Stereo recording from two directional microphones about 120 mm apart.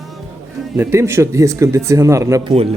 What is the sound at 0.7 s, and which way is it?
A man's voice, 20° right (ahead or behind).